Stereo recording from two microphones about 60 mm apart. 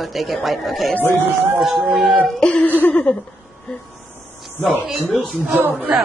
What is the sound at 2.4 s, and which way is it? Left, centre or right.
Speech, left.